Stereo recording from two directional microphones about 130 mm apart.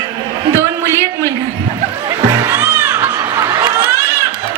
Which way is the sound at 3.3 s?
25° right (ahead or behind).